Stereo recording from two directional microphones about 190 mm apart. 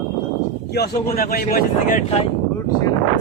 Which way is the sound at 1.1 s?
50° left (ahead or behind).